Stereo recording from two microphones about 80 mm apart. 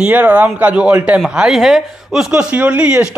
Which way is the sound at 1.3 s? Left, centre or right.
Centre.